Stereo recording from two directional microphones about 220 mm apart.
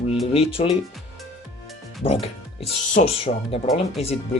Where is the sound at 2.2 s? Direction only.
25° left (ahead or behind).